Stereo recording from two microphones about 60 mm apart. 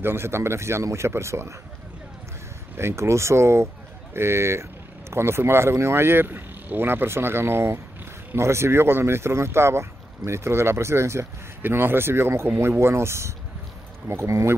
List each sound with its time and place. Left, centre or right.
0.0 s speech: right
2.8 s speech: right
11.6 s speech: right